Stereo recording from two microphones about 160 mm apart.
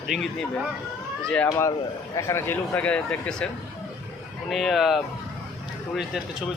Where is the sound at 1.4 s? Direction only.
20° left (ahead or behind).